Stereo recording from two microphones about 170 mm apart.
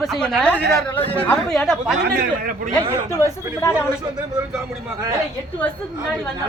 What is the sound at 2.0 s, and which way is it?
Speech, 65° right (ahead or behind).